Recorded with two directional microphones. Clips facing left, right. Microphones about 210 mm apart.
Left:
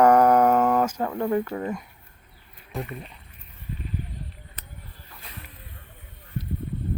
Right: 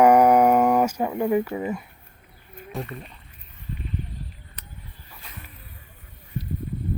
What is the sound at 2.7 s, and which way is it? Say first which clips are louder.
Speech: even; centre (ahead or behind).